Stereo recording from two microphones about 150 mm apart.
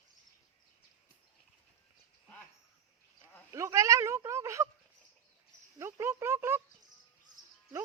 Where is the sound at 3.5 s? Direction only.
20° right (ahead or behind).